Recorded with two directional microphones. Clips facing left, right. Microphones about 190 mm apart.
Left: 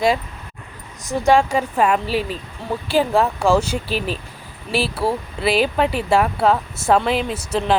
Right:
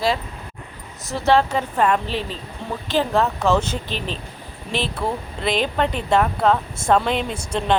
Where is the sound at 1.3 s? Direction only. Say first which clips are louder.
Left 2 dB; 10° left (ahead or behind).